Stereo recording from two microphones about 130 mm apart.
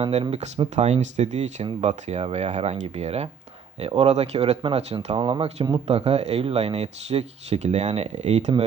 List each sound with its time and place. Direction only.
0.0 s speech: 50° right (ahead or behind)
5.1 s speech: 40° right (ahead or behind); by 8.5 s 60° right (ahead or behind)